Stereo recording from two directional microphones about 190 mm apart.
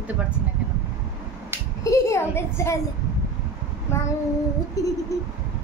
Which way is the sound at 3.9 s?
15° left (ahead or behind).